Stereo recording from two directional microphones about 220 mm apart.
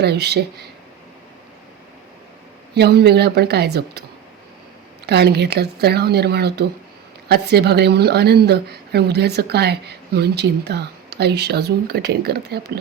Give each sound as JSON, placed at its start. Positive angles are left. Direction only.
{"t": 0.0, "sound": "a woman's voice", "side_deg": -50}
{"t": 2.7, "sound": "a woman's voice", "side_deg": -50}
{"t": 5.0, "sound": "a woman's voice", "side_deg": -50}